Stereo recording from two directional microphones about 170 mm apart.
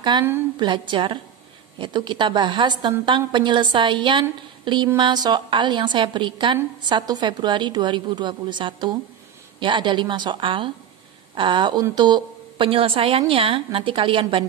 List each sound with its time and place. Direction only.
0.1 s a woman's voice: 25° right (ahead or behind)